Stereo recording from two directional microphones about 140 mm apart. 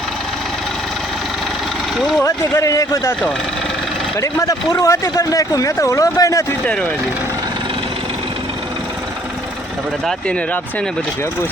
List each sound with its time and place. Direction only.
2.0 s speech: centre (ahead or behind)
2.2 s speech: 20° left (ahead or behind)
4.2 s speech: 20° left (ahead or behind)
10.1 s speech: 5° left (ahead or behind)